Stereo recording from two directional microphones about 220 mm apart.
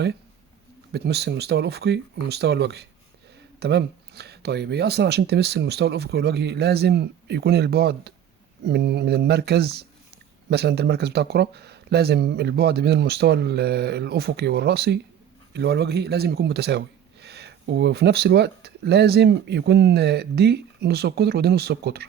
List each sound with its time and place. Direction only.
0.9 s speech: 50° right (ahead or behind)